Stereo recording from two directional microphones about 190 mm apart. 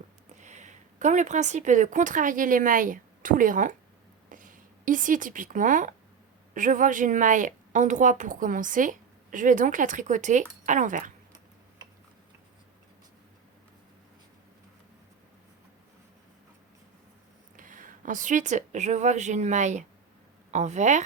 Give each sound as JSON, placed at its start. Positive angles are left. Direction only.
{"t": 0.3, "sound": "a woman's voice", "side_deg": -40}
{"t": 17.6, "sound": "a woman's voice", "side_deg": -45}